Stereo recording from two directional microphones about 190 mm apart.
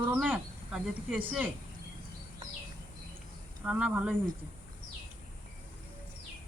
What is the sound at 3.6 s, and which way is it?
Speech, 5° right (ahead or behind).